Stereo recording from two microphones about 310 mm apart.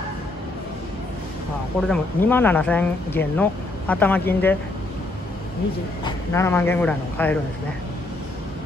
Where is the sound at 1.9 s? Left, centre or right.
Centre.